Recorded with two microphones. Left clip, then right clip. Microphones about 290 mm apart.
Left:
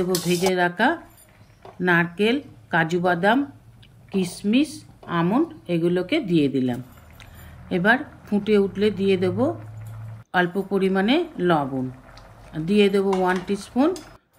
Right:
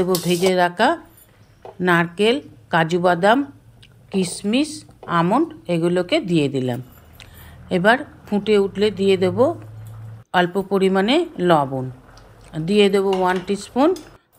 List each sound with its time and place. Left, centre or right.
0.0 s a woman's voice: centre